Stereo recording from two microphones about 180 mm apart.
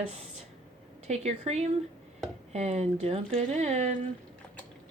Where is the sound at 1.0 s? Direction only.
35° right (ahead or behind).